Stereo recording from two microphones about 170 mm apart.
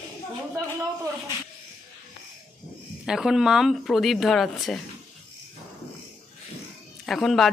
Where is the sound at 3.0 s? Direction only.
5° right (ahead or behind).